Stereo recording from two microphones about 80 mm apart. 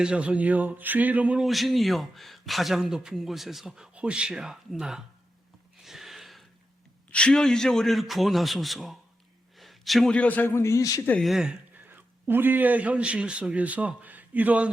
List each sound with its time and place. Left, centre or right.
0.0 s a man's voice: centre
1.4 s a man's voice: centre
5.8 s a sound: centre
7.1 s a man's voice: centre
9.6 s a sound: centre
10.1 s a man's voice: centre; by 11.0 s left
11.2 s a man's voice: centre
11.8 s a man's voice: right